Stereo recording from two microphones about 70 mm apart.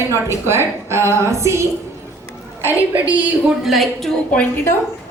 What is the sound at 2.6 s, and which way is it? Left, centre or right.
Speech, right.